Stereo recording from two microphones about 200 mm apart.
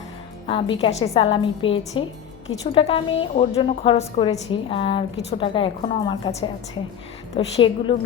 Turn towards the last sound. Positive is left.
turn(degrees=25)  # may be behind; listen again after turning